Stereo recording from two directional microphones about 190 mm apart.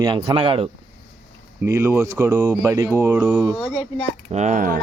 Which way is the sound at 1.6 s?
15° right (ahead or behind).